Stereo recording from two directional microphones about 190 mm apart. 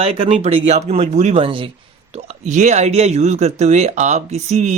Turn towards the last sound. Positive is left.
turn(degrees=-35)  # may be behind; listen again after turning